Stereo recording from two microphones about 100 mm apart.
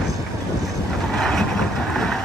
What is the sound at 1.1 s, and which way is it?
Vehicle, 5° left (ahead or behind).